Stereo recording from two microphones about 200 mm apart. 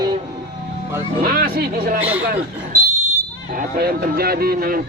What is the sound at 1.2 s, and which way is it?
Speech, 50° right (ahead or behind).